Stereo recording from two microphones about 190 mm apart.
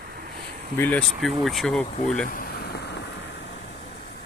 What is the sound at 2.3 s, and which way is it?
Vehicle, 50° left (ahead or behind).